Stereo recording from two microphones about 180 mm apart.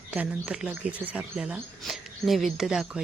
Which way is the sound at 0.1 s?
5° right (ahead or behind).